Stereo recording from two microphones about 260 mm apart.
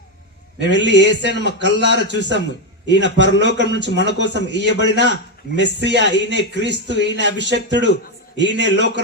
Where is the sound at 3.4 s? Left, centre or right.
Right.